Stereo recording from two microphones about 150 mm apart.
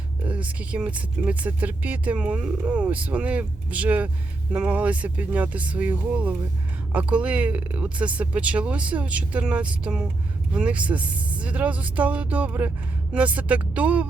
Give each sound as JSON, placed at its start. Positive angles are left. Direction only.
{"t": 0.3, "sound": "speech", "side_deg": -10}